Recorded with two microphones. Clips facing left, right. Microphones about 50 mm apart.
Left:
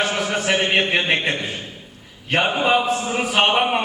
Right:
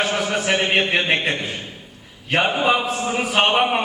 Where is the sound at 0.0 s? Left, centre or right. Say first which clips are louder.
Even; centre.